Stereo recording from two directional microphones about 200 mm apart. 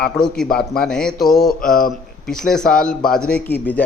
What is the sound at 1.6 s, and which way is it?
Mantra, 45° left (ahead or behind).